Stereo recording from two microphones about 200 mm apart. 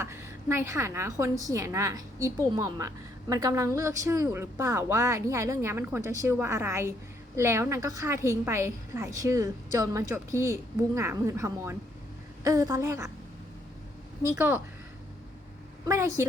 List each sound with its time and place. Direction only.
0.0 s a woman's voice: 15° right (ahead or behind)
14.2 s a woman's voice: 10° right (ahead or behind)
15.9 s a woman's voice: 15° right (ahead or behind)